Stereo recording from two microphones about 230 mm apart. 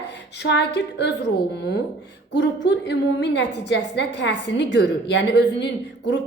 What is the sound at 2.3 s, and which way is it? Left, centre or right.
A woman's voice, left.